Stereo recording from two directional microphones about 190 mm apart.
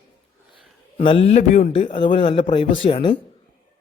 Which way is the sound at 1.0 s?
30° left (ahead or behind).